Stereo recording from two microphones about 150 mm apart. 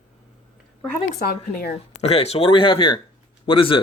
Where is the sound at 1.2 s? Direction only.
90° left.